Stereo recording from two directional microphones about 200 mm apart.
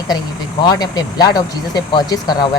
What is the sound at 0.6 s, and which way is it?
Speech, 20° left (ahead or behind).